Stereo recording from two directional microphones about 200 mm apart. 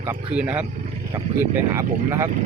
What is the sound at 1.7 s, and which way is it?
Speech, 15° right (ahead or behind).